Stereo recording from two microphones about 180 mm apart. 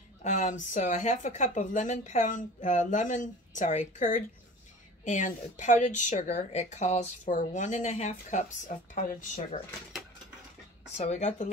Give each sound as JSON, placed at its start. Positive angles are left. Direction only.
{"t": 0.2, "sound": "speech", "side_deg": 40}
{"t": 11.0, "sound": "speech", "side_deg": 40}